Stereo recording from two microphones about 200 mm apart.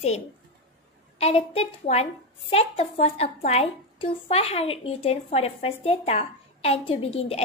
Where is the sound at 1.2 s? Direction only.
30° left (ahead or behind).